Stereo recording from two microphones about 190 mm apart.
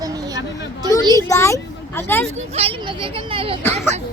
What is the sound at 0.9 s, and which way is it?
Speech, 15° left (ahead or behind).